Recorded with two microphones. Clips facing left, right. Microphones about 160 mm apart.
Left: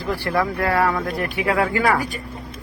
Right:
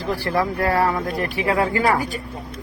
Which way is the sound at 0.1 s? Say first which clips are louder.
Even; 40° right (ahead or behind).